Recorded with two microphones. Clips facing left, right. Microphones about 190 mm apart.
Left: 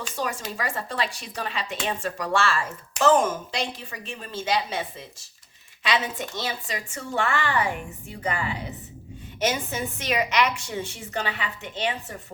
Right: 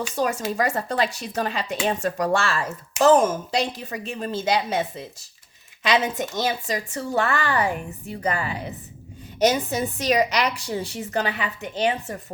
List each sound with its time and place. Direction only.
0.2 s speech: 40° right (ahead or behind)